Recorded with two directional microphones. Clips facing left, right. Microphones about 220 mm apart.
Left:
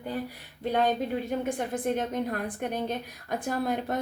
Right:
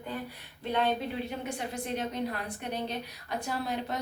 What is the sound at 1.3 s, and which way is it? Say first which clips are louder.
Speech: left 6 dB; 50° left (ahead or behind).